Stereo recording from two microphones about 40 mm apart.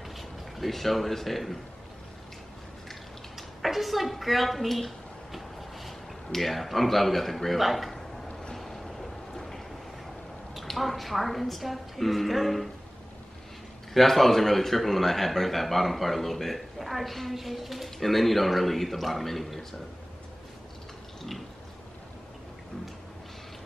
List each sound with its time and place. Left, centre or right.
0.1 s a man's voice: centre
2.9 s a sound: centre
8.3 s boat: left
8.5 s boat: centre
10.5 s a woman's voice: centre
13.9 s a man's voice: centre